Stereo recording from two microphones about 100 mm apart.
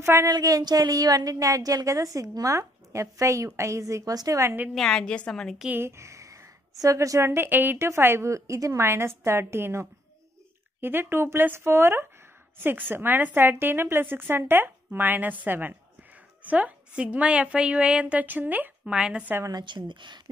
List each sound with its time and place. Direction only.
0.0 s speech: 25° right (ahead or behind)
0.3 s a woman's voice: 35° right (ahead or behind)
4.7 s a woman's voice: 5° left (ahead or behind)
5.8 s a woman's voice: 25° right (ahead or behind); by 19.3 s 10° right (ahead or behind)
19.6 s speech: 50° right (ahead or behind)